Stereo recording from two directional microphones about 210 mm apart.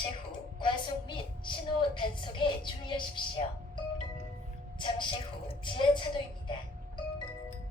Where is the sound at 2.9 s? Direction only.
25° left (ahead or behind).